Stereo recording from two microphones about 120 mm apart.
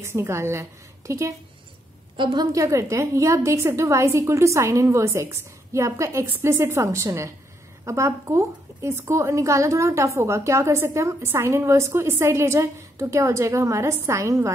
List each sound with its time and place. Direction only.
0.0 s a woman's voice: 20° right (ahead or behind)
2.1 s a woman's voice: 35° right (ahead or behind)